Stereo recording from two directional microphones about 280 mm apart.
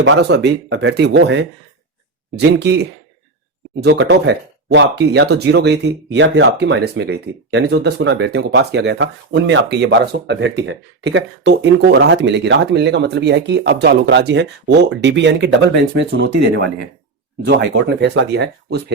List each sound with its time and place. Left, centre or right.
0.0 s speech: right